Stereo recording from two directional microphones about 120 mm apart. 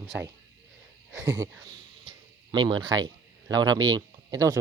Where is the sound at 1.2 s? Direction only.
25° right (ahead or behind).